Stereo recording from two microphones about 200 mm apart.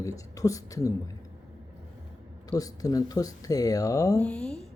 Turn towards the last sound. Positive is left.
turn(degrees=5)  # may be behind; listen again after turning